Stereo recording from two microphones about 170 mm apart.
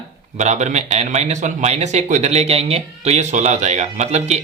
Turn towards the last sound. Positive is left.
turn(degrees=-40)  # may be behind; listen again after turning